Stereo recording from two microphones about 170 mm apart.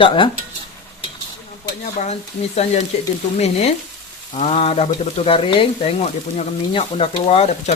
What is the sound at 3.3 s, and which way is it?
Speech, 40° left (ahead or behind).